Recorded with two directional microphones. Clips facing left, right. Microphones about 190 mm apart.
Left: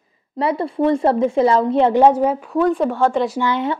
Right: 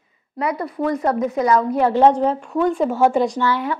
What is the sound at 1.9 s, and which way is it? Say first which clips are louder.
Speech: left 1 dB; 10° left (ahead or behind).